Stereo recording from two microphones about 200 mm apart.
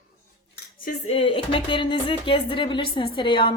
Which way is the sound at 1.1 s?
25° left (ahead or behind).